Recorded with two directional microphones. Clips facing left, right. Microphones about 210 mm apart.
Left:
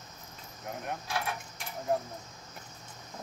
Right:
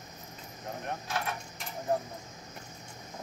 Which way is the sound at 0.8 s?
10° left (ahead or behind).